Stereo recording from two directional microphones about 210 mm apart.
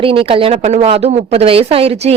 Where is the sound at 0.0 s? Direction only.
25° right (ahead or behind).